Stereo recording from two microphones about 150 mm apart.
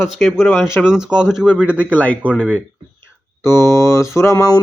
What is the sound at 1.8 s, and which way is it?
Speech, 10° left (ahead or behind).